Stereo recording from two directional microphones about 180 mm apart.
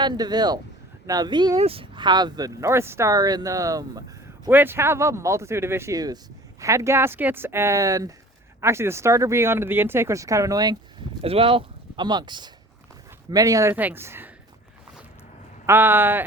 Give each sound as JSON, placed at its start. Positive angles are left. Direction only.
{"t": 0.0, "sound": "speech", "side_deg": -25}
{"t": 11.2, "sound": "speech", "side_deg": -30}
{"t": 15.6, "sound": "speech", "side_deg": -10}